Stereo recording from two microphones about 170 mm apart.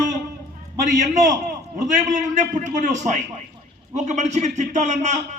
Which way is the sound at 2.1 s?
45° right (ahead or behind).